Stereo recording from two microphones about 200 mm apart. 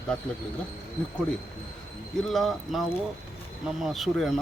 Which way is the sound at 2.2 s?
Centre (ahead or behind).